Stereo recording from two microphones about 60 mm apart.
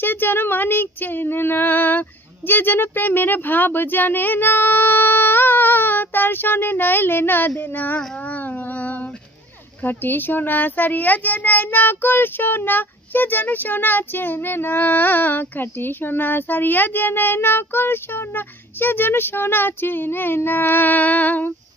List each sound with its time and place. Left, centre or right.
0.0 s a child's voice: left